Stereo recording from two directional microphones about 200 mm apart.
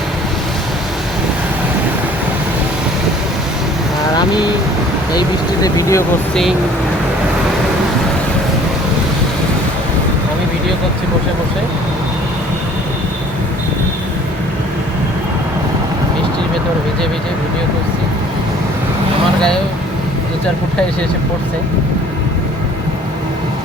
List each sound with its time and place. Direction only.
4.1 s boat: 20° left (ahead or behind)
5.6 s speech: 15° left (ahead or behind)